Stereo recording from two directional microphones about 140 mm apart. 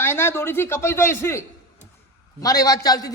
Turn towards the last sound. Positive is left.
turn(degrees=25)  # may be behind; listen again after turning